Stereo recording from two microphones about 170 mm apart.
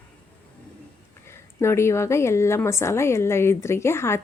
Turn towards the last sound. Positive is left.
turn(degrees=15)  # may be behind; listen again after turning